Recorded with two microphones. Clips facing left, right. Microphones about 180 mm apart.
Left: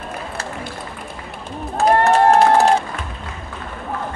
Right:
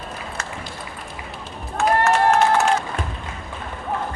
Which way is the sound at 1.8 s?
35° left (ahead or behind).